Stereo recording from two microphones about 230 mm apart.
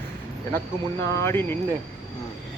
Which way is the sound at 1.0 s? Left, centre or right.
Centre.